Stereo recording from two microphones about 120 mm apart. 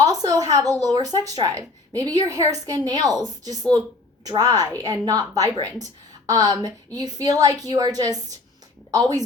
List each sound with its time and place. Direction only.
0.0 s a sound: 30° right (ahead or behind)
0.5 s a woman's voice: 30° right (ahead or behind)
6.2 s a woman's voice: 30° right (ahead or behind)